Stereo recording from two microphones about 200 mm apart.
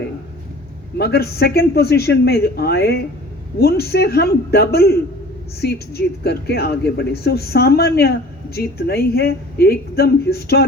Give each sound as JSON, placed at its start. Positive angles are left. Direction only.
{"t": 0.9, "sound": "speech", "side_deg": 50}